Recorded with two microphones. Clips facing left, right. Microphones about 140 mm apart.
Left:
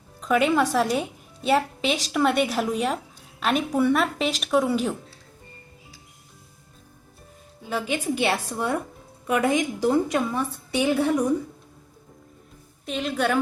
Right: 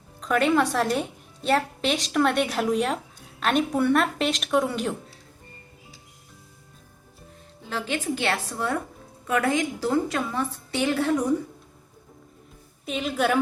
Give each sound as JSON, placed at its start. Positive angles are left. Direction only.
{"t": 0.2, "sound": "a woman's voice", "side_deg": 0}
{"t": 7.6, "sound": "a woman's voice", "side_deg": 10}
{"t": 12.8, "sound": "a woman's voice", "side_deg": -5}